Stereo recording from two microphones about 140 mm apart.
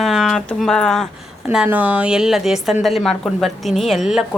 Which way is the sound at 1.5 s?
10° right (ahead or behind).